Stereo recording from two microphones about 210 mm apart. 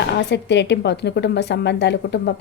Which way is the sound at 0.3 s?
55° left (ahead or behind).